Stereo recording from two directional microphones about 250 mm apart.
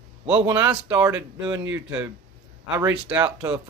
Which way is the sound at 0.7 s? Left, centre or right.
Centre.